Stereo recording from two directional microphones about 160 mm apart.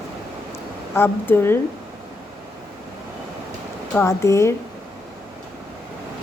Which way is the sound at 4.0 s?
20° left (ahead or behind).